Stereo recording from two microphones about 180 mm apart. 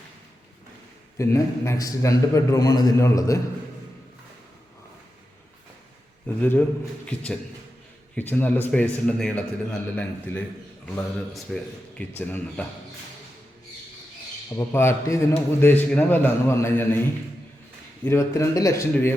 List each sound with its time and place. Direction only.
1.2 s a man's voice: 15° left (ahead or behind)
6.4 s a man's voice: 10° left (ahead or behind)
14.5 s a man's voice: 15° left (ahead or behind)
18.0 s a man's voice: 15° left (ahead or behind)